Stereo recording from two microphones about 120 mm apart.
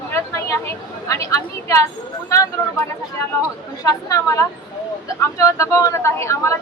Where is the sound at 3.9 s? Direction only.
30° left (ahead or behind).